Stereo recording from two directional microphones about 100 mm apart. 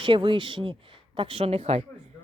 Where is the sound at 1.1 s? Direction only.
70° right (ahead or behind).